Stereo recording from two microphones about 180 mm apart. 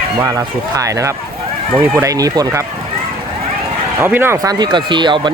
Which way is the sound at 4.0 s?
10° right (ahead or behind).